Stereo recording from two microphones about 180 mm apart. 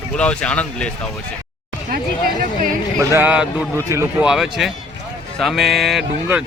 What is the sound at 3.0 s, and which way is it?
A man's voice, 10° right (ahead or behind).